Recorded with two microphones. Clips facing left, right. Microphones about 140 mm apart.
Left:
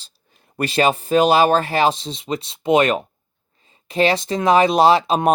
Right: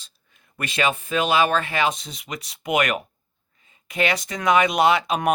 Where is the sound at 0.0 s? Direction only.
35° left (ahead or behind).